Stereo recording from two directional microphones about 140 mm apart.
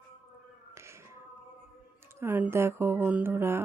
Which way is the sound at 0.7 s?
20° right (ahead or behind).